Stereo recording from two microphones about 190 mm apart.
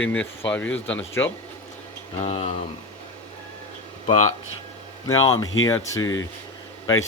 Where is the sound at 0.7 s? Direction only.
80° left.